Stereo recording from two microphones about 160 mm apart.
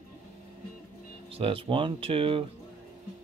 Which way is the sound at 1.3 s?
35° right (ahead or behind).